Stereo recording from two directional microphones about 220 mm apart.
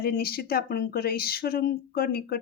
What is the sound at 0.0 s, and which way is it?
Speech, 45° left (ahead or behind).